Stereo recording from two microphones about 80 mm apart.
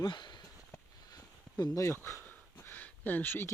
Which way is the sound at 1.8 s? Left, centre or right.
Left.